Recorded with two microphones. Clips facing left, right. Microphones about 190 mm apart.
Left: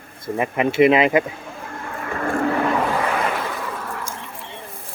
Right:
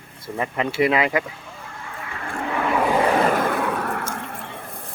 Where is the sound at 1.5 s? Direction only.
50° left (ahead or behind).